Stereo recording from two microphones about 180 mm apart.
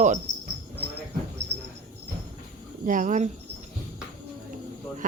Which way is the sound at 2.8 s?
45° right (ahead or behind).